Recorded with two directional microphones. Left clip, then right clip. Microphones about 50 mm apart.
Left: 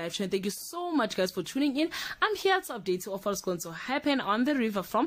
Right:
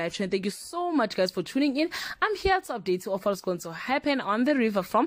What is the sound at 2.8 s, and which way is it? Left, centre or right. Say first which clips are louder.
Speech: right 4 dB; right.